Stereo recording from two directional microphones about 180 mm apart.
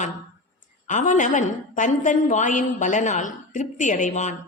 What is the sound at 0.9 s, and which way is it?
A woman's voice, 45° left (ahead or behind).